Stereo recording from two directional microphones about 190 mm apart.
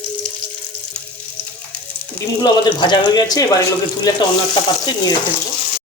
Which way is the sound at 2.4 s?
25° left (ahead or behind).